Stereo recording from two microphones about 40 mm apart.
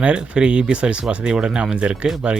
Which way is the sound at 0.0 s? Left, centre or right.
Right.